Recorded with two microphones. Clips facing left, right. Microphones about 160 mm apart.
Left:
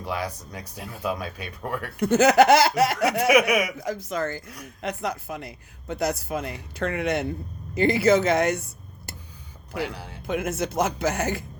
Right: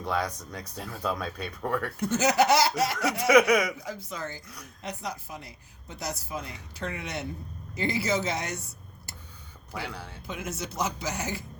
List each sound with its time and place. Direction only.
0.5 s speech: 10° left (ahead or behind)
2.0 s speech: 60° left (ahead or behind)
3.3 s speech: 10° left (ahead or behind)
3.8 s speech: 85° left
4.2 s speech: 55° left (ahead or behind)
9.7 s speech: 15° left (ahead or behind)
10.2 s speech: 55° left (ahead or behind)